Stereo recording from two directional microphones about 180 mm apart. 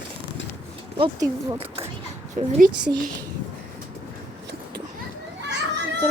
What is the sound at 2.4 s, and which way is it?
Speech, 45° right (ahead or behind).